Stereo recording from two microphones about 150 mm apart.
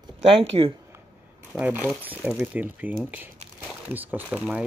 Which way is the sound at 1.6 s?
10° right (ahead or behind).